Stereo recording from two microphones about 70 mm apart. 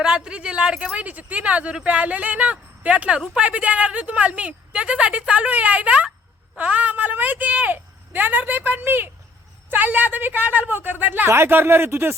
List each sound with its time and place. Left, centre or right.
0.0 s a woman's voice: centre; by 12.1 s right